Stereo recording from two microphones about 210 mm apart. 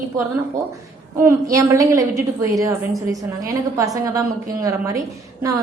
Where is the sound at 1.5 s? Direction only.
15° right (ahead or behind).